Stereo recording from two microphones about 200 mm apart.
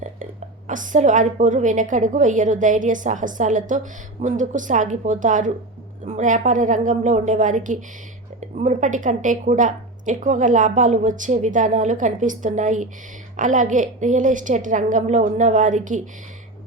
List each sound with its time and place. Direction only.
0.0 s a woman's voice: 40° right (ahead or behind)